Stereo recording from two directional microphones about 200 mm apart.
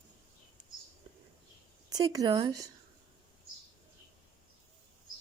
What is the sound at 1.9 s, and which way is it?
Speech, 20° right (ahead or behind).